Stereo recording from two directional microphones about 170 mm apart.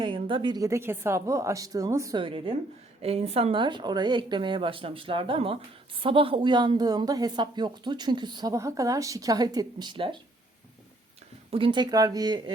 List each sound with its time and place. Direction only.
0.0 s a woman's voice: 30° right (ahead or behind)
2.2 s a woman's voice: 30° right (ahead or behind)
11.5 s a woman's voice: 30° right (ahead or behind)